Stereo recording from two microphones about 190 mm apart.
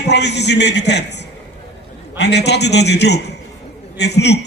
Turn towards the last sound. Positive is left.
turn(degrees=60)  # may be behind; listen again after turning